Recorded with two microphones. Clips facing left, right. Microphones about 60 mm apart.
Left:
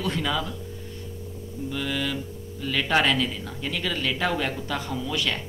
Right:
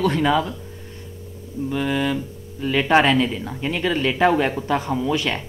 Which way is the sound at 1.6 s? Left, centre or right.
Right.